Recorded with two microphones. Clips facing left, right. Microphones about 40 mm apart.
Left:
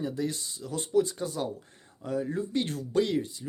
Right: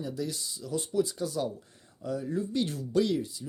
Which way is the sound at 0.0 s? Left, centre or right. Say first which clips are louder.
Left 3 dB; left.